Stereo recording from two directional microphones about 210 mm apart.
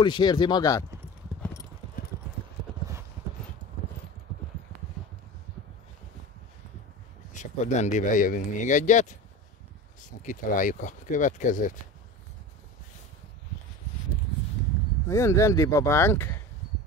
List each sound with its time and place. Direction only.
0.0 s speech: 20° left (ahead or behind)
1.4 s clip-clop: 15° left (ahead or behind)
7.3 s speech: 35° left (ahead or behind)
10.0 s speech: 40° left (ahead or behind)
15.0 s speech: 15° left (ahead or behind)